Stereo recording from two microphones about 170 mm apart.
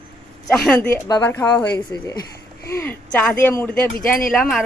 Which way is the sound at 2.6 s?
15° left (ahead or behind).